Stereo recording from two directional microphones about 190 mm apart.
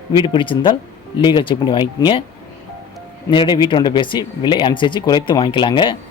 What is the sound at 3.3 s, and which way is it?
Speech, 25° left (ahead or behind).